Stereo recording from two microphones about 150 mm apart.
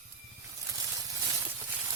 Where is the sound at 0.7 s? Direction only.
25° right (ahead or behind).